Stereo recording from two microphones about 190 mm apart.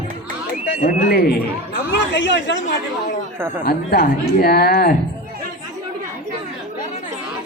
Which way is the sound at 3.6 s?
50° left (ahead or behind).